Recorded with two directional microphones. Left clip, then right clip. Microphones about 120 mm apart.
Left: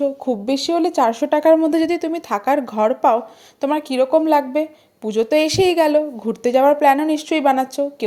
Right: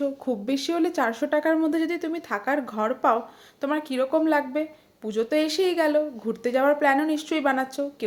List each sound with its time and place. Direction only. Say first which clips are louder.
0.0 s speech: left 7 dB; 35° left (ahead or behind)